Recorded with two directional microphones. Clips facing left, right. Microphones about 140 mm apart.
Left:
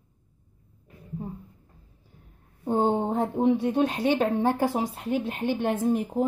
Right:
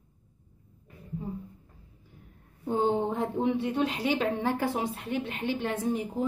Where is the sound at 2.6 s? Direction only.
45° left (ahead or behind).